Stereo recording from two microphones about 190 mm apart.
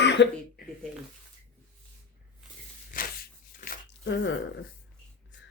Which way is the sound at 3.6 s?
40° left (ahead or behind).